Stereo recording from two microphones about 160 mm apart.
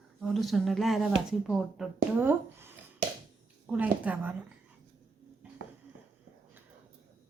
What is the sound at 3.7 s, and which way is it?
Speech, 10° right (ahead or behind).